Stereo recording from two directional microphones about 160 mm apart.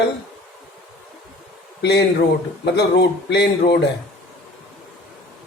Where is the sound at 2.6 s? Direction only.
90° left.